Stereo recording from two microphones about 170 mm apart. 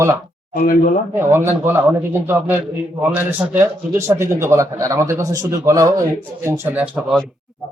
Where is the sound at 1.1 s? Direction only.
15° right (ahead or behind).